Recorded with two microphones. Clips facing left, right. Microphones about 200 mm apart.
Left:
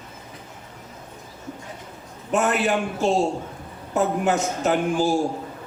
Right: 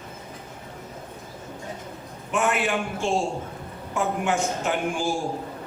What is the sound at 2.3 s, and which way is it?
A man's voice, 40° left (ahead or behind).